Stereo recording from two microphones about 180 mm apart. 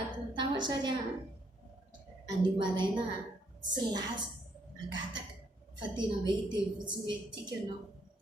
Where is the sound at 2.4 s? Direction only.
25° right (ahead or behind).